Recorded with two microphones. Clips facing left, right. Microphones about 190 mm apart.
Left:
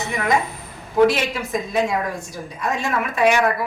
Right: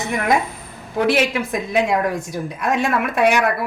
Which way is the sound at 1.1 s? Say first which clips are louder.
Right 4 dB; 65° right (ahead or behind).